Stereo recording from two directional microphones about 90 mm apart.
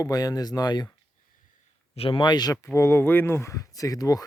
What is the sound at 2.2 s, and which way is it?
Speech, 50° left (ahead or behind).